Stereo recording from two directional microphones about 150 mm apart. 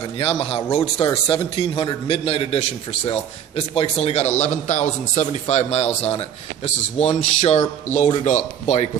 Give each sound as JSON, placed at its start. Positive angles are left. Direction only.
{"t": 0.2, "sound": "a man's voice", "side_deg": 40}